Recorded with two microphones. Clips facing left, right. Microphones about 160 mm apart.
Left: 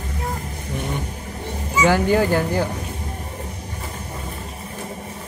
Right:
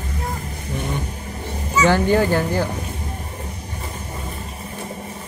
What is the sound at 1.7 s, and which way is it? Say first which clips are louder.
Speech: right 1 dB; 10° left (ahead or behind).